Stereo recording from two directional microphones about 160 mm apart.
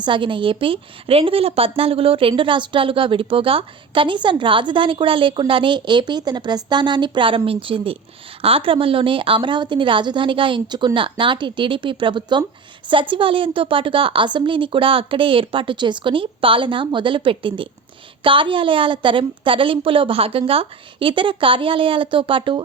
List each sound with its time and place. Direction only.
0.0 s a woman's voice: 30° right (ahead or behind)